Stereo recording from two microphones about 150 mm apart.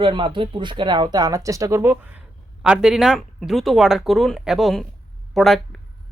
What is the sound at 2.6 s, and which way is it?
Speech, 5° right (ahead or behind).